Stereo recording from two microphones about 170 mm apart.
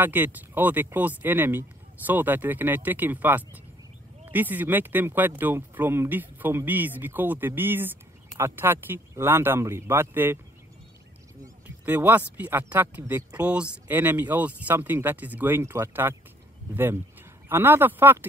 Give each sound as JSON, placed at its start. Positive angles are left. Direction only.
{"t": 0.0, "sound": "speech", "side_deg": -10}
{"t": 11.4, "sound": "speech", "side_deg": -10}